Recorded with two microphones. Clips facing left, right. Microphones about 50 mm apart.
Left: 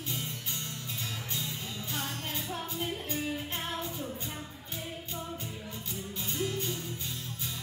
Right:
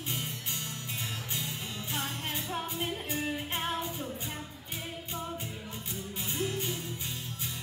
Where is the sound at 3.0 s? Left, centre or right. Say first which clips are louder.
Right 1 dB; right.